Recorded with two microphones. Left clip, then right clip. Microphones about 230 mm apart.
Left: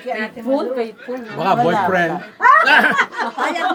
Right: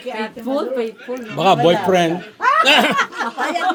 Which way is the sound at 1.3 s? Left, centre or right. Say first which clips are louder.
Right 2 dB; right.